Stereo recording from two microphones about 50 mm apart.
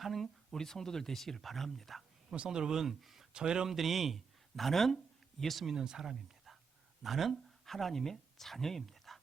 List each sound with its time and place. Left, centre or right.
0.0 s speech: centre
2.5 s speech: centre
3.3 s speech: centre
3.7 s speech: centre